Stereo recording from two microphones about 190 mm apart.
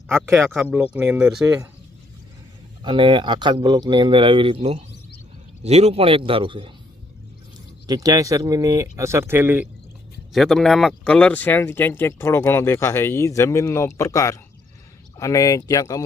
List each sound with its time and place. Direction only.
0.3 s speech: 15° right (ahead or behind)
2.8 s speech: 25° right (ahead or behind)
7.9 s speech: 20° right (ahead or behind)
10.3 s speech: centre (ahead or behind); by 16.0 s 20° left (ahead or behind)